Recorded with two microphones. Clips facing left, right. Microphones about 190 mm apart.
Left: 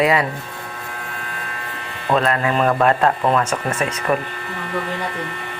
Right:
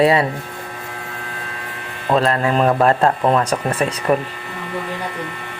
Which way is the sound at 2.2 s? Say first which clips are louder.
Right 2 dB; 35° right (ahead or behind).